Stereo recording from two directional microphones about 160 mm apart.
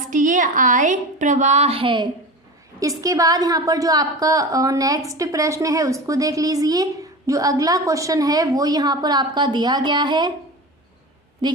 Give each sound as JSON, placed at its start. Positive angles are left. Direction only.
{"t": 0.0, "sound": "a woman's voice", "side_deg": -55}
{"t": 3.0, "sound": "a woman's voice", "side_deg": -20}
{"t": 11.4, "sound": "a woman's voice", "side_deg": -25}